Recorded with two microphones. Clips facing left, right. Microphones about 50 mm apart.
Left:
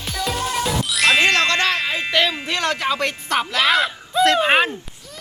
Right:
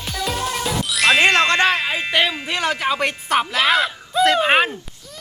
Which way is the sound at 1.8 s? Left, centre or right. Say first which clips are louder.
Even; centre.